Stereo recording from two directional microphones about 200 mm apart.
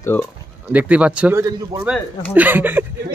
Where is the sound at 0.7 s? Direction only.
5° right (ahead or behind).